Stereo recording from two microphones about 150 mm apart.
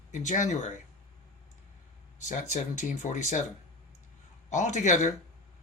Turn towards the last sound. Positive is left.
turn(degrees=55)  # may be behind; listen again after turning